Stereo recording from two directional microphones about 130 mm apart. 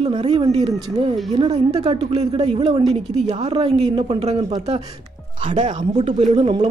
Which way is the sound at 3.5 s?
45° right (ahead or behind).